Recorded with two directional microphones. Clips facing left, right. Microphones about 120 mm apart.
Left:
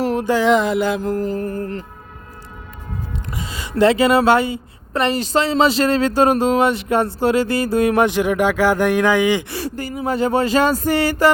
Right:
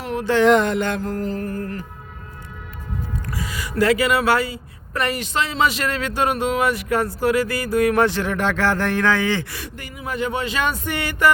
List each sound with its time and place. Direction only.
0.0 s a sound: 35° left (ahead or behind)
0.3 s mantra: 5° left (ahead or behind)
1.4 s speech: 25° left (ahead or behind)
3.3 s speech: 25° left (ahead or behind)
9.5 s speech: 35° left (ahead or behind)